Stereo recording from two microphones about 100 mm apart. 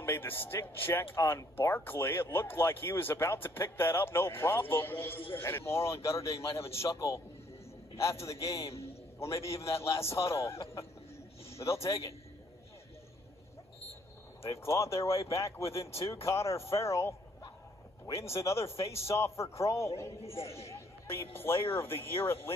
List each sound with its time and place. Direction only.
0.0 s speech: 25° left (ahead or behind)
8.3 s a man's voice: 30° left (ahead or behind)
14.4 s speech: 30° left (ahead or behind)
18.1 s speech: 30° left (ahead or behind)
20.6 s a sound: 25° left (ahead or behind)
21.4 s speech: 25° left (ahead or behind)